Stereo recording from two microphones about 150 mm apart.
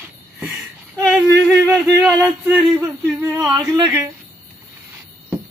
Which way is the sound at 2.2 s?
5° right (ahead or behind).